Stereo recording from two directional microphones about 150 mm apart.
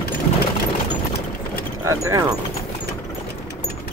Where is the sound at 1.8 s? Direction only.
20° right (ahead or behind).